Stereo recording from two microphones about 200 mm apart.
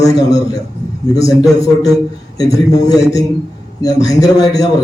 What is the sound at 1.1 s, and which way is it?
A man's voice, 15° left (ahead or behind).